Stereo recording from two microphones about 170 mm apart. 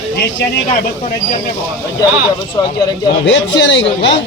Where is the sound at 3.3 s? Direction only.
90° left.